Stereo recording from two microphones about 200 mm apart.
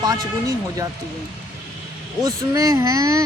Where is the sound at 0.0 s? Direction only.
20° right (ahead or behind).